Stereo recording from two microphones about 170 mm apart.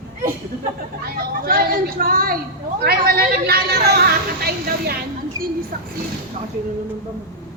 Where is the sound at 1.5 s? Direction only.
60° right (ahead or behind).